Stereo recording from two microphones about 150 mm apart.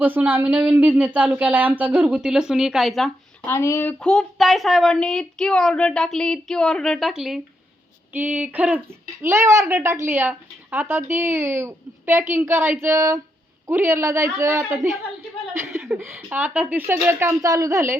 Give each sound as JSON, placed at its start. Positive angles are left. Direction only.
{"t": 0.0, "sound": "speech", "side_deg": -15}
{"t": 3.4, "sound": "a woman's voice", "side_deg": 20}